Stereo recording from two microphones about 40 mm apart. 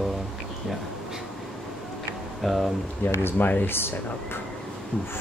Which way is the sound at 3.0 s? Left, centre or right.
Left.